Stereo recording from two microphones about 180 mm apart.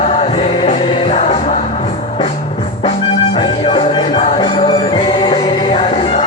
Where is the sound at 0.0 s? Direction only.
35° left (ahead or behind).